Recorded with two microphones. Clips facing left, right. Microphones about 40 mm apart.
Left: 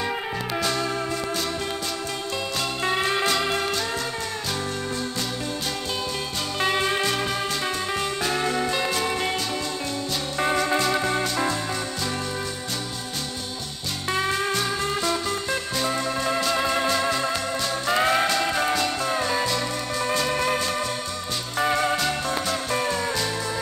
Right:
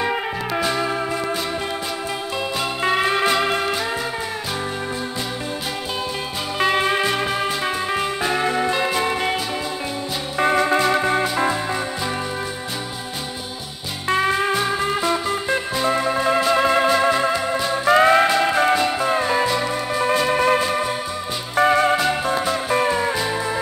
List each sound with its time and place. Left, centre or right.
0.0 s music: centre
2.8 s music: centre
6.6 s music: centre
10.4 s music: centre
14.0 s music: right